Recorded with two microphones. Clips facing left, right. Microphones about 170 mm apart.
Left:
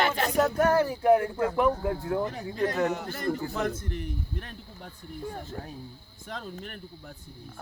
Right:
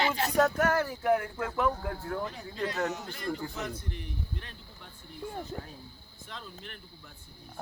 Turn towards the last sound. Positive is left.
turn(degrees=50)  # may be behind; listen again after turning